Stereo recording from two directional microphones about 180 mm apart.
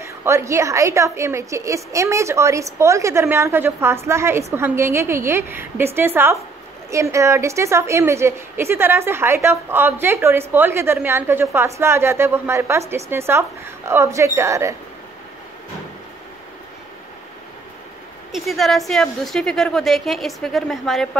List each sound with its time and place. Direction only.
0.0 s a woman's voice: 15° right (ahead or behind)
18.3 s a woman's voice: centre (ahead or behind)